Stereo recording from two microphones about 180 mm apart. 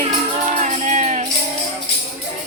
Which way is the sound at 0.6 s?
45° right (ahead or behind).